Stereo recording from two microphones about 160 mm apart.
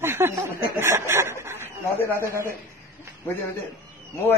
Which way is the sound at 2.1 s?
15° right (ahead or behind).